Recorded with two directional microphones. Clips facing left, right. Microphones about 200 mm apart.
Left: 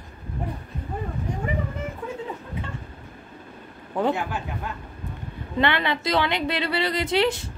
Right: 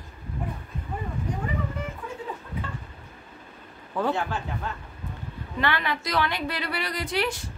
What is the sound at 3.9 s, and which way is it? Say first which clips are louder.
Speech: left 2 dB; 20° left (ahead or behind).